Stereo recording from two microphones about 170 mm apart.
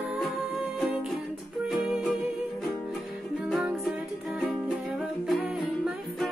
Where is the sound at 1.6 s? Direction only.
Centre (ahead or behind).